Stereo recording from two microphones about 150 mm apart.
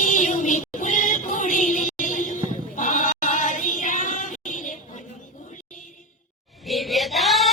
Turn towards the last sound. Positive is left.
turn(degrees=0)  # may be behind; listen again after turning